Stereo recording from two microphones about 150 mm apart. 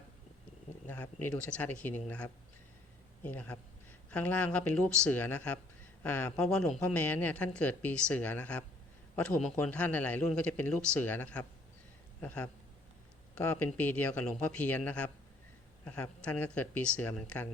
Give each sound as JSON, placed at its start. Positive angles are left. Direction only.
{"t": 1.2, "sound": "speech", "side_deg": 10}
{"t": 13.6, "sound": "speech", "side_deg": 10}